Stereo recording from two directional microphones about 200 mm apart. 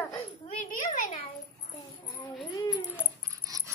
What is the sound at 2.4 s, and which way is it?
Speech, 15° left (ahead or behind).